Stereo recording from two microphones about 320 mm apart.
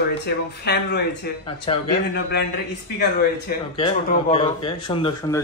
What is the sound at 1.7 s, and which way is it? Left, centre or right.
Speech, centre.